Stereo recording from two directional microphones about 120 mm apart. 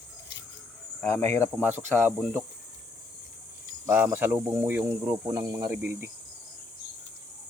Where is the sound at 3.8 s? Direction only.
15° right (ahead or behind).